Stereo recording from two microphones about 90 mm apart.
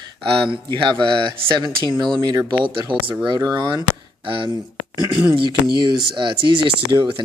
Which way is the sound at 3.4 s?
45° right (ahead or behind).